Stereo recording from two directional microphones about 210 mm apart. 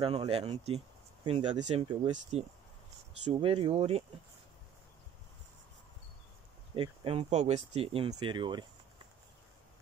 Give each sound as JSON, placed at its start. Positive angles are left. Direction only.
{"t": 0.0, "sound": "speech", "side_deg": -25}
{"t": 6.7, "sound": "speech", "side_deg": -25}